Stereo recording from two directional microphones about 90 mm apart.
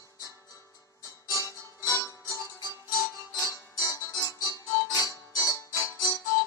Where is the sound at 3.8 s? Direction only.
35° left (ahead or behind).